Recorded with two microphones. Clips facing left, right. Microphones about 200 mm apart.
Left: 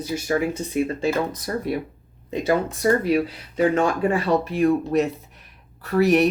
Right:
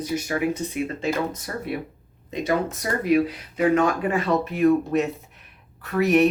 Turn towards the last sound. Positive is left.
turn(degrees=35)  # may be behind; listen again after turning